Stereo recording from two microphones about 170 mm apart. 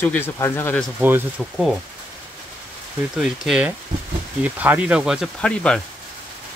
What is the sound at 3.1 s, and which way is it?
Speech, 5° right (ahead or behind).